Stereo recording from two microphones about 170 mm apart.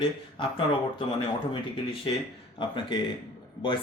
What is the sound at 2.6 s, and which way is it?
Speech, 30° left (ahead or behind).